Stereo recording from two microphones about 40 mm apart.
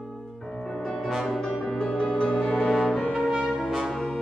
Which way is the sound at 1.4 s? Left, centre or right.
Centre.